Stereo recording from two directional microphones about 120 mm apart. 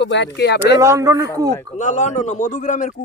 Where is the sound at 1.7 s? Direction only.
85° left.